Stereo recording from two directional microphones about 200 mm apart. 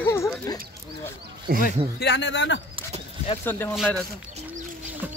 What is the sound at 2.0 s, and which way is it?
Speech, 60° left (ahead or behind).